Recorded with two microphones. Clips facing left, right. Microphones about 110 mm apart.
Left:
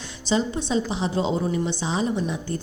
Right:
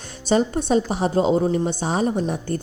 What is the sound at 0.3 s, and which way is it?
A woman's voice, 50° right (ahead or behind).